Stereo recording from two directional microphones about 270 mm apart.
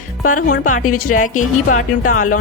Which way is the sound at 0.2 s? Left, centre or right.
Left.